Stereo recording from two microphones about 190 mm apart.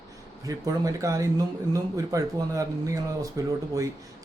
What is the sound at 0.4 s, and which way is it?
Speech, 20° right (ahead or behind).